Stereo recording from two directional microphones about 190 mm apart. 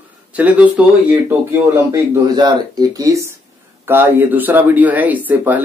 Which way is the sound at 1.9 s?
20° right (ahead or behind).